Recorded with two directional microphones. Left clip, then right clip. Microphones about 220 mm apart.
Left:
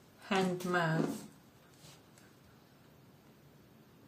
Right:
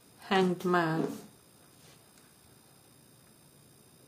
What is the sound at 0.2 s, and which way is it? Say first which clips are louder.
Speech: right 6 dB; 55° right (ahead or behind).